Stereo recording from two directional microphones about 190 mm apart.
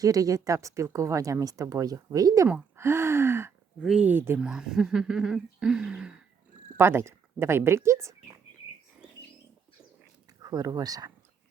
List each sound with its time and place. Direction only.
0.0 s speech: 20° right (ahead or behind)
10.4 s speech: 20° right (ahead or behind)